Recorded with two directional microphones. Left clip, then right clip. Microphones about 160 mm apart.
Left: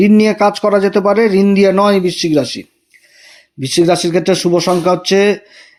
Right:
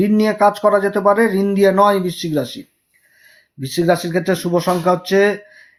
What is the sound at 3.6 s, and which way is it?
Speech, 25° left (ahead or behind).